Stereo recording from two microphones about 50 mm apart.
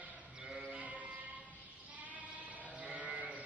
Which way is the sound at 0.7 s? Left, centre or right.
Right.